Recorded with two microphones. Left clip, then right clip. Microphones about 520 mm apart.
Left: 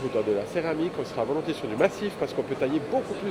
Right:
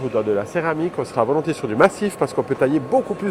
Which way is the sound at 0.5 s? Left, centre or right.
Right.